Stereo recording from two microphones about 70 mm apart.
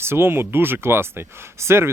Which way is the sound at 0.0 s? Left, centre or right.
Right.